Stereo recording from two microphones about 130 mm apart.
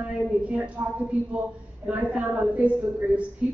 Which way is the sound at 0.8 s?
20° right (ahead or behind).